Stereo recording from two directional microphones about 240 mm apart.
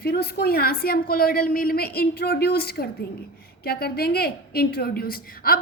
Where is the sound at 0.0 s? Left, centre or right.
Left.